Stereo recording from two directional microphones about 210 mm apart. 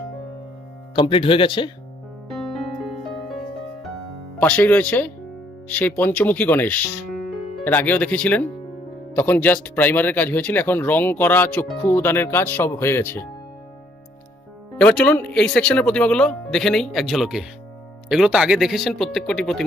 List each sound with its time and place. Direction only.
0.9 s speech: 25° left (ahead or behind)
4.4 s speech: 5° left (ahead or behind)
14.8 s speech: 5° left (ahead or behind)